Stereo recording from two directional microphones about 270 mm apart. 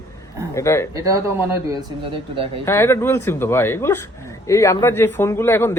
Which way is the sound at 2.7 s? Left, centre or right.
Centre.